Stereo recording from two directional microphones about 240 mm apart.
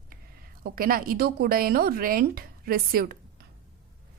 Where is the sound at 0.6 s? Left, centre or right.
Right.